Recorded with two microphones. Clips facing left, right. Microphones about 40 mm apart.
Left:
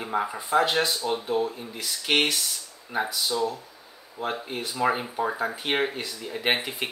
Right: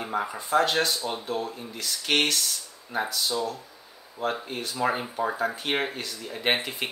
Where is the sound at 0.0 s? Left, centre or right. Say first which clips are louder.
Left 2 dB; centre.